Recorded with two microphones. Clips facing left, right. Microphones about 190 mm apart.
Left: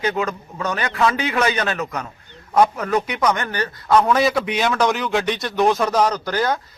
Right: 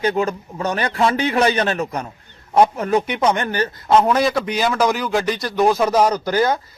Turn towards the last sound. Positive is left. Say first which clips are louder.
# right 3 dB
turn(degrees=-10)  # may be behind; listen again after turning